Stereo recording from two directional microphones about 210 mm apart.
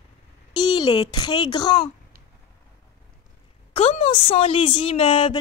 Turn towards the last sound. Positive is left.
turn(degrees=25)  # may be behind; listen again after turning